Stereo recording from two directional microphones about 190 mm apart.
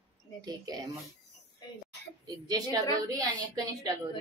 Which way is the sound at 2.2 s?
20° right (ahead or behind).